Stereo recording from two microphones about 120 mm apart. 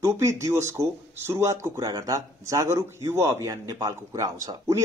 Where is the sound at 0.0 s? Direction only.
25° right (ahead or behind).